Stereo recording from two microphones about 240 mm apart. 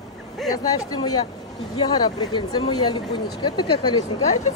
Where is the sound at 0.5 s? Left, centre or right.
Centre.